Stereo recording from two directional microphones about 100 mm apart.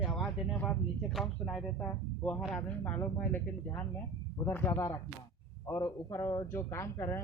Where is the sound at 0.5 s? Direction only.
15° left (ahead or behind).